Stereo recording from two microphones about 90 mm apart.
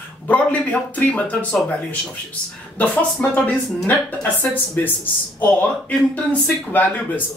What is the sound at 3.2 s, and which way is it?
Speech, 15° left (ahead or behind).